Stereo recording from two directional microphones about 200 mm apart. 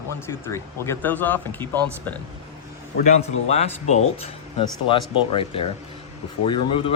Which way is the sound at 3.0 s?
35° left (ahead or behind).